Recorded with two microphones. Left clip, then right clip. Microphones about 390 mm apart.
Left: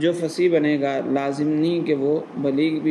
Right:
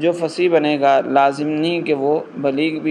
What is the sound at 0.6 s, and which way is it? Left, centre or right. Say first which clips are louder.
A man's voice: right 7 dB; centre.